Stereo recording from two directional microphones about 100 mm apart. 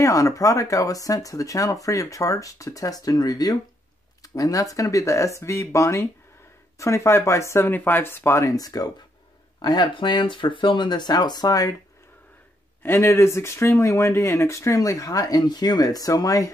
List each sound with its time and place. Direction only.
0.0 s speech: 35° left (ahead or behind)
12.8 s speech: 25° left (ahead or behind)